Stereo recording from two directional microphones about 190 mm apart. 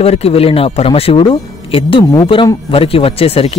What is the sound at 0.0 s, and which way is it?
Speech, 30° left (ahead or behind).